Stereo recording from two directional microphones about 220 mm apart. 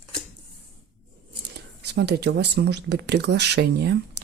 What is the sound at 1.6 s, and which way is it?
Speech, 50° right (ahead or behind).